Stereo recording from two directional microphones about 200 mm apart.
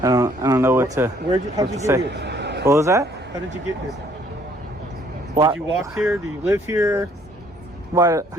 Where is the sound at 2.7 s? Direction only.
15° right (ahead or behind).